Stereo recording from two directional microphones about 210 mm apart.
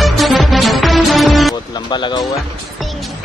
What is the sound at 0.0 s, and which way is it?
Music, centre (ahead or behind).